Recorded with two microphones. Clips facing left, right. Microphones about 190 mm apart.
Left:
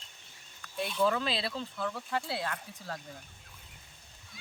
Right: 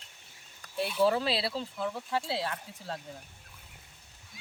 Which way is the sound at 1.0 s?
30° right (ahead or behind).